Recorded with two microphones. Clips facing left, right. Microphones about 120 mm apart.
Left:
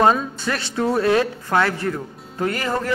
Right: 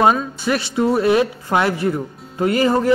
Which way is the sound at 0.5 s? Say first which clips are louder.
Right 4 dB; 10° right (ahead or behind).